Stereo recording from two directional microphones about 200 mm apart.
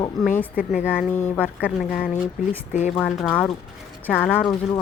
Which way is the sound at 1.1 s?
10° left (ahead or behind).